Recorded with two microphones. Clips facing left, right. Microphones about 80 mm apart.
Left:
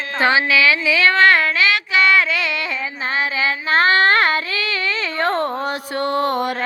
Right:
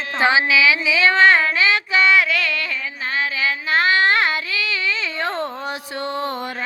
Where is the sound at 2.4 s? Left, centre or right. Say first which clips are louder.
Even; left.